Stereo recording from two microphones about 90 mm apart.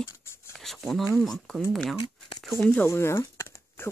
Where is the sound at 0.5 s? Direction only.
5° left (ahead or behind).